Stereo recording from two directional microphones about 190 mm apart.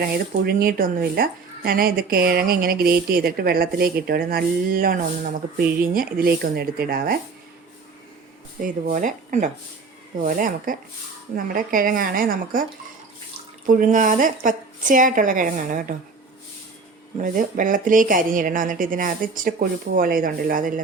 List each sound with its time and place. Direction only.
0.0 s speech: 50° right (ahead or behind)
8.6 s speech: 45° right (ahead or behind)
13.7 s speech: 45° right (ahead or behind)
17.2 s speech: 45° right (ahead or behind)